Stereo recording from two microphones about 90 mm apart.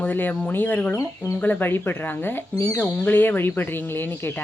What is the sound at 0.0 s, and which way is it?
Speech, 20° left (ahead or behind).